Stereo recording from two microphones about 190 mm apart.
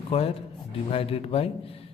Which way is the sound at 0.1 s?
35° left (ahead or behind).